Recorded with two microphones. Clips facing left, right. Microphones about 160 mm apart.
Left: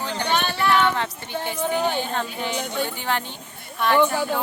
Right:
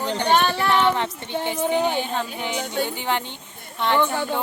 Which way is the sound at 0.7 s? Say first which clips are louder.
Left 2 dB; 20° right (ahead or behind).